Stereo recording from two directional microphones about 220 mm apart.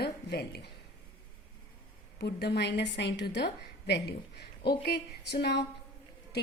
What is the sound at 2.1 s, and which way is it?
A woman's voice, 50° left (ahead or behind).